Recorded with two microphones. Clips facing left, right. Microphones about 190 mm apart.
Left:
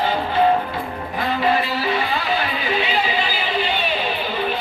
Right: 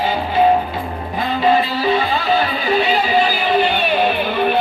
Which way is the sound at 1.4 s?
25° right (ahead or behind).